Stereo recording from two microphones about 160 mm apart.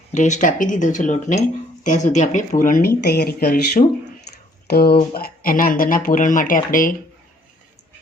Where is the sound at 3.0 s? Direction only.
90° left; by 6.9 s 55° left (ahead or behind).